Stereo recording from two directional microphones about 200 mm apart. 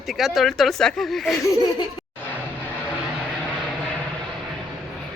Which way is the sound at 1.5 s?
20° left (ahead or behind).